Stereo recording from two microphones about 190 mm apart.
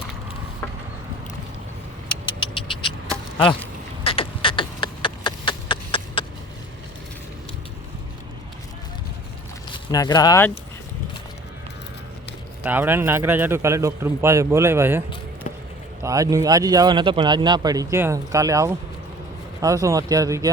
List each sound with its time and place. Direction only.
2.0 s vehicle: 25° left (ahead or behind)
4.0 s a sound: 30° left (ahead or behind)
9.7 s speech: 20° left (ahead or behind)
12.6 s speech: 10° right (ahead or behind)
16.0 s speech: 15° right (ahead or behind)